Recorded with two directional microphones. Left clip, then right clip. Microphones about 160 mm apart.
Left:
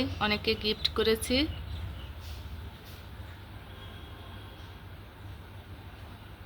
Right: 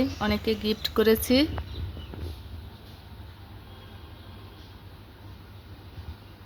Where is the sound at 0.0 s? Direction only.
35° right (ahead or behind).